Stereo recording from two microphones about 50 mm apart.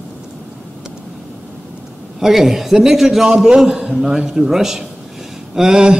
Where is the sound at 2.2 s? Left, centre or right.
Centre.